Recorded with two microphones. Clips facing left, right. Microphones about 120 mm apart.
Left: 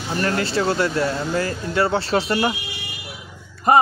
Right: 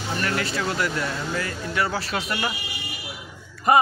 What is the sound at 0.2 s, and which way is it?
Speech, 35° left (ahead or behind).